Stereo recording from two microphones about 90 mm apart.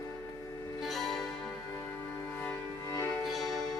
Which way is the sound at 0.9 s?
Centre (ahead or behind).